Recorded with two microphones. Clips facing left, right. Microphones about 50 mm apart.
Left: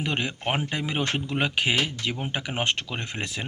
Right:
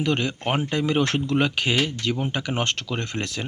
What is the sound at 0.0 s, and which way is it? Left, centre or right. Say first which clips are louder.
A man's voice: right 4 dB; centre.